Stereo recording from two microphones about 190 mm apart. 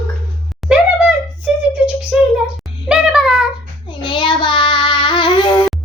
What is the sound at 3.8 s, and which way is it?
Child singing, 25° left (ahead or behind).